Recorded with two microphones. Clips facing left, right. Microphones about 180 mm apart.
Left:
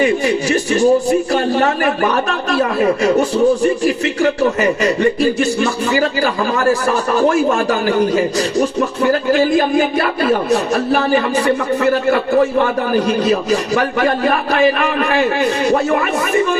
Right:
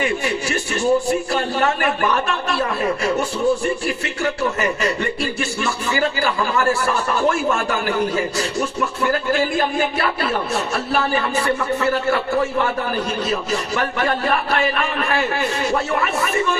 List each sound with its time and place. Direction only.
0.5 s speech: 40° left (ahead or behind)